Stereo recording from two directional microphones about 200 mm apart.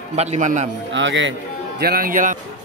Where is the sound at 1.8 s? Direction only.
50° right (ahead or behind).